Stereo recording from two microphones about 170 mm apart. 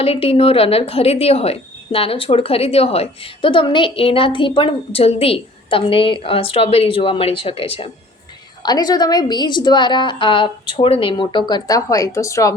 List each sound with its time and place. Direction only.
0.0 s a woman's voice: 35° left (ahead or behind); by 12.5 s 20° left (ahead or behind)